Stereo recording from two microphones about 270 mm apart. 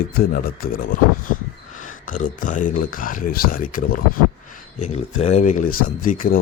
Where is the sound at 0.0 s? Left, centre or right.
Left.